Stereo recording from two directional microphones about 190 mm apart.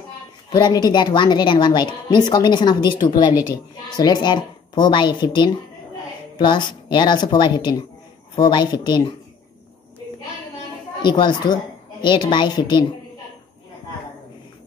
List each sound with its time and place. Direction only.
0.5 s a woman's voice: 20° left (ahead or behind)
11.0 s a woman's voice: 25° left (ahead or behind)